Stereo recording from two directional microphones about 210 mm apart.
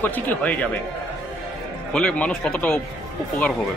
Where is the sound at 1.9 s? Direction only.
5° left (ahead or behind).